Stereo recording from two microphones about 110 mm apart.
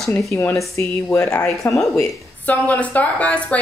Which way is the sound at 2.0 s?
15° left (ahead or behind).